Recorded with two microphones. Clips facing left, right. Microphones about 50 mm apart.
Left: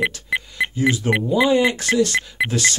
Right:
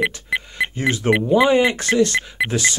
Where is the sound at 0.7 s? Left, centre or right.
Right.